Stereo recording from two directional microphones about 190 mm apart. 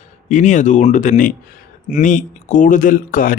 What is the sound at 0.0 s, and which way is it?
Speech, 40° left (ahead or behind).